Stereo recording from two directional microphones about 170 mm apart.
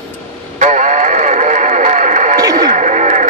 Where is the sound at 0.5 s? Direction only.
45° right (ahead or behind).